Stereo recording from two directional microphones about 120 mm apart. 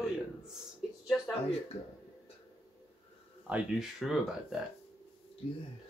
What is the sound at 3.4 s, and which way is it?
Speech, 5° right (ahead or behind).